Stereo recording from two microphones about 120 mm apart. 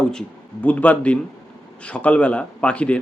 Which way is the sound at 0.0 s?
5° left (ahead or behind).